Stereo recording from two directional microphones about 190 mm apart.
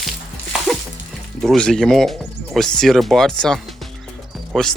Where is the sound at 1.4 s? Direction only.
5° left (ahead or behind).